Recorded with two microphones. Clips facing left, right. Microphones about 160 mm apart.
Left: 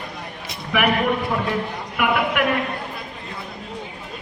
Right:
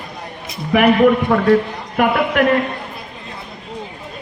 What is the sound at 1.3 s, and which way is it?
Speech, 65° right (ahead or behind).